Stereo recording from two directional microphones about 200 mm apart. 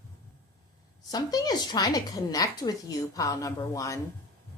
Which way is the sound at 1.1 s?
20° left (ahead or behind).